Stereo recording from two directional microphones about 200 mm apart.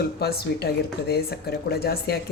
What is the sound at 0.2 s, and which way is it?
Speech, 50° left (ahead or behind).